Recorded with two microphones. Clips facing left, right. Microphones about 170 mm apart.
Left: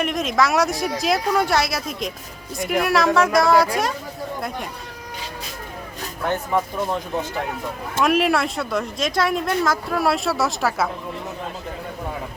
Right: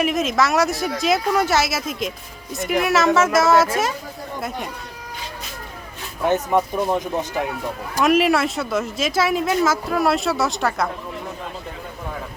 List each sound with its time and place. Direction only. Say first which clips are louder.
0.0 s speech: right 1 dB; 5° right (ahead or behind)
6.2 s speech: right 4 dB; 15° right (ahead or behind)
8.0 s speech: right 2 dB; centre (ahead or behind)